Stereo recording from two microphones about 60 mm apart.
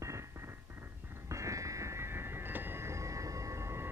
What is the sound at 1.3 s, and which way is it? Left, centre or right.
Music, right.